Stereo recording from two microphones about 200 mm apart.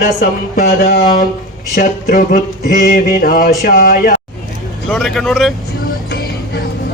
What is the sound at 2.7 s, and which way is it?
Mantra, 45° left (ahead or behind).